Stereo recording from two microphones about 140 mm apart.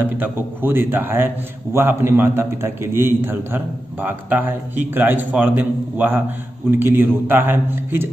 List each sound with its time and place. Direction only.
0.2 s a man's voice: 15° right (ahead or behind)